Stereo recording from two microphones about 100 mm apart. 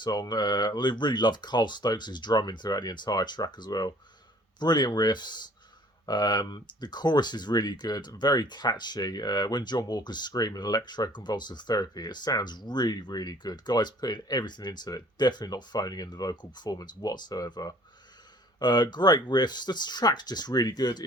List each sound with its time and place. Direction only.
0.0 s speech: 45° left (ahead or behind)